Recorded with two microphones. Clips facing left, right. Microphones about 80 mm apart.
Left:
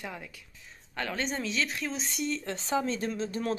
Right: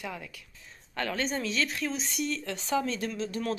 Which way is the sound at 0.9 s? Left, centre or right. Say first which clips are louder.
Right 2 dB; centre.